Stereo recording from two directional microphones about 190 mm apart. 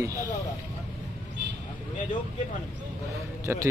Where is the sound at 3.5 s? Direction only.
10° right (ahead or behind).